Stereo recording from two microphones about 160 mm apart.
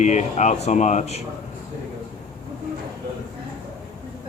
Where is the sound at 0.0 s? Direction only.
45° left (ahead or behind).